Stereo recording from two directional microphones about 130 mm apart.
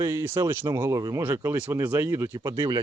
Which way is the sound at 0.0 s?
20° right (ahead or behind).